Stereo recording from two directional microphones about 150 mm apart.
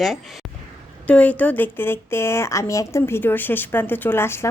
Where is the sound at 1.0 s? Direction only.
10° left (ahead or behind).